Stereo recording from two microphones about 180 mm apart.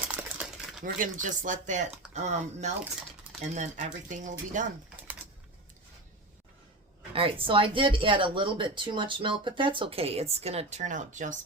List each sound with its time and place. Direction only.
0.1 s crumpling: 5° right (ahead or behind)
0.8 s speech: 45° right (ahead or behind)
7.1 s speech: 30° right (ahead or behind)